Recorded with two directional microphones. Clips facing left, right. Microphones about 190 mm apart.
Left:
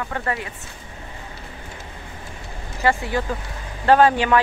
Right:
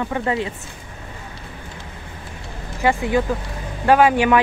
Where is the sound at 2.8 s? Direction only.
15° right (ahead or behind).